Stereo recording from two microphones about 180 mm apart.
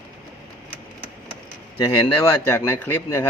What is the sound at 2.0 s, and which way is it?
Speech, 15° left (ahead or behind).